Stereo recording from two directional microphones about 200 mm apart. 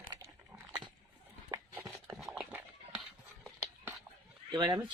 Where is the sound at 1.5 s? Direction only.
15° right (ahead or behind).